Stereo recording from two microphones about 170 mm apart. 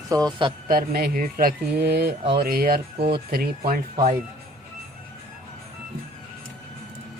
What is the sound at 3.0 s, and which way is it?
Speech, 30° right (ahead or behind).